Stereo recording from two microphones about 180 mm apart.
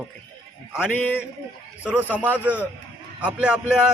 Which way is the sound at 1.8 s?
10° right (ahead or behind).